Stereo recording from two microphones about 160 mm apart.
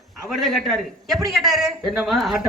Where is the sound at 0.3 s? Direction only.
Centre (ahead or behind).